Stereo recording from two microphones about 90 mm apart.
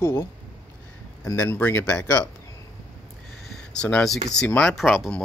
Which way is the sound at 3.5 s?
10° left (ahead or behind).